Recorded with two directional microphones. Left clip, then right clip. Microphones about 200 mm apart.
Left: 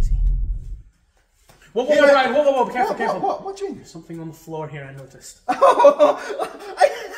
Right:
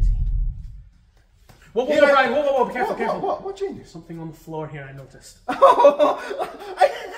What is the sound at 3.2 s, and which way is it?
Speech, 5° right (ahead or behind).